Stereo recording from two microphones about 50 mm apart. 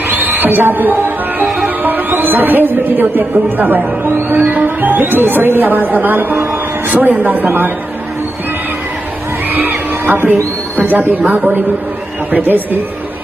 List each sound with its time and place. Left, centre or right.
0.1 s music: right
1.8 s speech: right
4.5 s a man's voice: right
9.5 s music: right
10.8 s a man's voice: right